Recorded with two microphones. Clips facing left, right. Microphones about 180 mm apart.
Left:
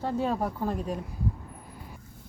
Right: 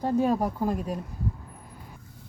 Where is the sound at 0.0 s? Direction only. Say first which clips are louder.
Right 4 dB; 10° right (ahead or behind).